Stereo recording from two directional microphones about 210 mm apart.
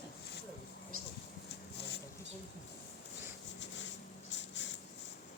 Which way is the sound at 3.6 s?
60° left (ahead or behind).